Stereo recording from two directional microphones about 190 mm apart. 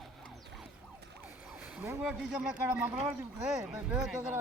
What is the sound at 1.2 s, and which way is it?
Speech, 5° right (ahead or behind).